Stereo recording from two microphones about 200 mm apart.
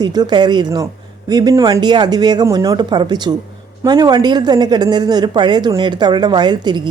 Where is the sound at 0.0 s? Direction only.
20° right (ahead or behind).